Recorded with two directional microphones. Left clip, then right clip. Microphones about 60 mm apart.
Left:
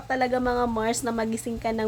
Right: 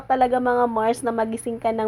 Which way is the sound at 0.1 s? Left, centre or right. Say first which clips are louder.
Right 5 dB; right.